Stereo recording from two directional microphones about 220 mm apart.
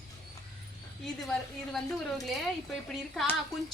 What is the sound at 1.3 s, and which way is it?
A woman's voice, centre (ahead or behind).